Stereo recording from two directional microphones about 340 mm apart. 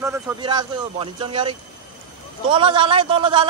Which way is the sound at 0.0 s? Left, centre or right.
Centre.